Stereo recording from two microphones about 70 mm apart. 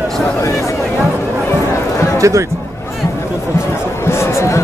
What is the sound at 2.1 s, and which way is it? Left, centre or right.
Speech, right.